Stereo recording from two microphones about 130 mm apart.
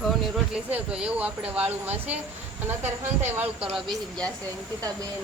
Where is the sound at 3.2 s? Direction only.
15° right (ahead or behind).